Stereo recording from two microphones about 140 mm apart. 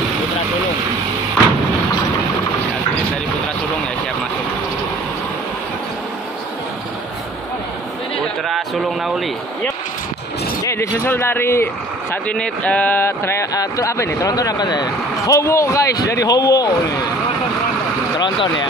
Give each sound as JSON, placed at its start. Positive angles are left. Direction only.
{"t": 8.5, "sound": "speech", "side_deg": 0}
{"t": 10.6, "sound": "speech", "side_deg": 20}